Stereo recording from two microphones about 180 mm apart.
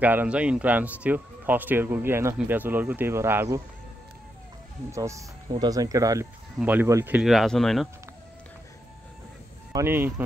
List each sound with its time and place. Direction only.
0.0 s speech: 10° right (ahead or behind)
4.9 s speech: 15° right (ahead or behind); by 7.9 s centre (ahead or behind)
9.7 s speech: 15° right (ahead or behind)